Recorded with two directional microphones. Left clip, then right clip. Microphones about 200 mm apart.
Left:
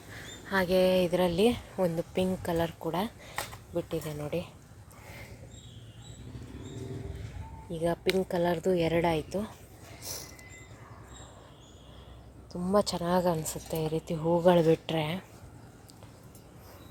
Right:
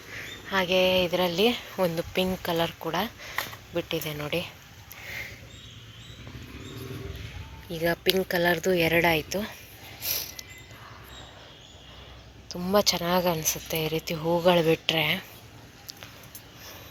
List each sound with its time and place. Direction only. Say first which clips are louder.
0.4 s speech: right 2 dB; 25° left (ahead or behind)
3.8 s speech: right 4 dB; 5° left (ahead or behind)
7.7 s speech: right 4 dB; 10° left (ahead or behind)
10.0 s mechanisms: right 9 dB; 10° left (ahead or behind)
12.7 s speech: right 4 dB; 15° left (ahead or behind)
14.2 s speech: right 1 dB; centre (ahead or behind)
14.4 s speech: right 2 dB; 20° left (ahead or behind)